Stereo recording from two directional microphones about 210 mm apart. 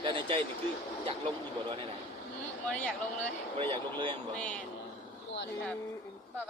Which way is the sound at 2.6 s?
5° left (ahead or behind).